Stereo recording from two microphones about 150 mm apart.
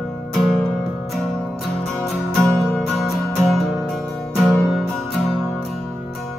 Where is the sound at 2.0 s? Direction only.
Centre (ahead or behind).